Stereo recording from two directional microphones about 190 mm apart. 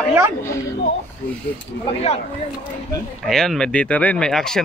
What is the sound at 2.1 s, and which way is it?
Speech, 35° left (ahead or behind).